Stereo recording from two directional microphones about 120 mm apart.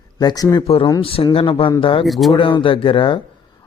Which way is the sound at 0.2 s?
35° left (ahead or behind).